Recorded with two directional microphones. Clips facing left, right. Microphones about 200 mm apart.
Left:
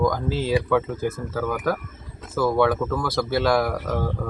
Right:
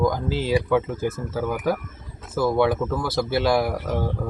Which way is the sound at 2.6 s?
25° right (ahead or behind).